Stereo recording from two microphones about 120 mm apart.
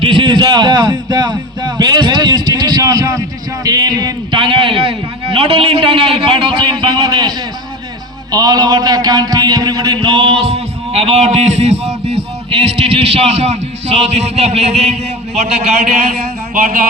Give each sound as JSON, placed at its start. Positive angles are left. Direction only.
{"t": 0.0, "sound": "a man's voice", "side_deg": -45}
{"t": 10.2, "sound": "a man's voice", "side_deg": -50}